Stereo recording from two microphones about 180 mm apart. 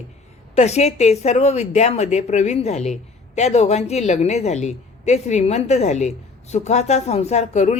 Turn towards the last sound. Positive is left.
turn(degrees=40)  # may be behind; listen again after turning